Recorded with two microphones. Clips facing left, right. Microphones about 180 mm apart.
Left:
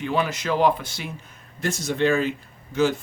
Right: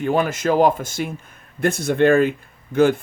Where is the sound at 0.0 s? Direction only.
50° right (ahead or behind).